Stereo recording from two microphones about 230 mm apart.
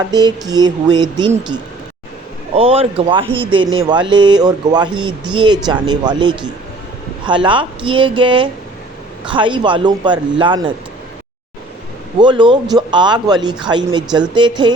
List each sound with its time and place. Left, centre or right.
0.1 s a sound: centre
2.6 s speech: right
12.2 s speech: centre